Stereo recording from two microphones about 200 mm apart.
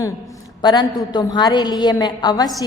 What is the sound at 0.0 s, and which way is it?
A woman's voice, 15° left (ahead or behind).